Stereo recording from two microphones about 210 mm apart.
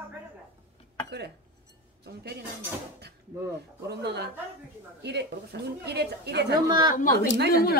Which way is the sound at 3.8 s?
50° right (ahead or behind).